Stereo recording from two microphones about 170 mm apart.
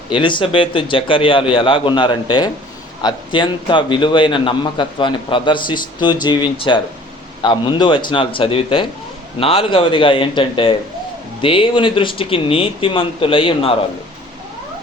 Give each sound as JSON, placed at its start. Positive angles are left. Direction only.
{"t": 0.1, "sound": "a man's voice", "side_deg": 30}